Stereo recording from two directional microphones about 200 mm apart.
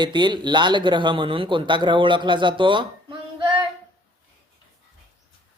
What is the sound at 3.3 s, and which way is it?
Female singing, 25° right (ahead or behind).